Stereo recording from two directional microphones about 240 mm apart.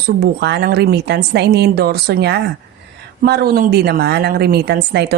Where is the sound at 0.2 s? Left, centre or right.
Right.